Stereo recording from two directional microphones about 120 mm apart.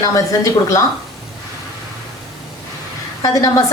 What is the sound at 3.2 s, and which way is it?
Speech, 30° left (ahead or behind).